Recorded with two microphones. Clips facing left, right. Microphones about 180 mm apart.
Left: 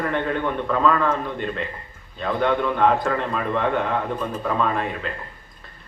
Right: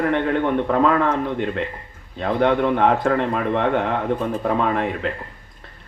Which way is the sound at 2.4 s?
65° right (ahead or behind).